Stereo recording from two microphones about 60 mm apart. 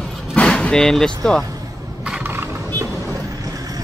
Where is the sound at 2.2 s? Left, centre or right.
Right.